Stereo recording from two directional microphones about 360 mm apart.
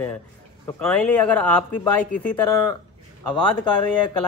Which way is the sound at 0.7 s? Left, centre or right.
Centre.